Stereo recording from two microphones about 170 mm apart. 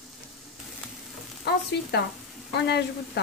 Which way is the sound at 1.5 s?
75° left (ahead or behind).